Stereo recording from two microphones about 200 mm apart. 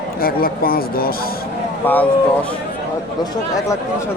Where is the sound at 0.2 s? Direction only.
50° left (ahead or behind).